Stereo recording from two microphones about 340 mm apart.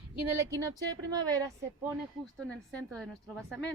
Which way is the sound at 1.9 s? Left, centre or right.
Centre.